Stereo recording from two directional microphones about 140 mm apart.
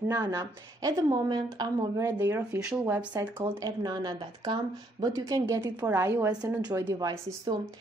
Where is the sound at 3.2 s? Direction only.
20° right (ahead or behind).